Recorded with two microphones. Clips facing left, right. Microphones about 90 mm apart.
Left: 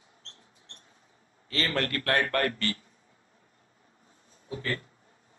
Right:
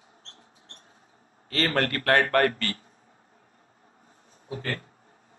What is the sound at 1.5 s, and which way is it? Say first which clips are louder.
A man's voice: right 4 dB; 45° right (ahead or behind).